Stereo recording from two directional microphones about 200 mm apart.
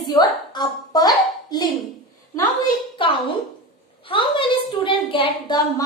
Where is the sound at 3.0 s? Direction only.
25° left (ahead or behind).